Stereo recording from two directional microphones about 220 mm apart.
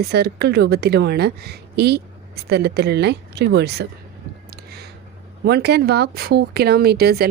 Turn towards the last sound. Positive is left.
turn(degrees=-45)  # may be behind; listen again after turning